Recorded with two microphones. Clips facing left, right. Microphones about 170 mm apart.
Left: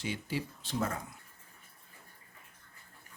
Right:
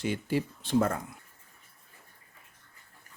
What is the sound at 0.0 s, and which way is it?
Speech, 50° right (ahead or behind).